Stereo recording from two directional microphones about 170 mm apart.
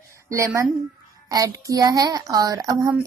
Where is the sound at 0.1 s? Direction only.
15° right (ahead or behind).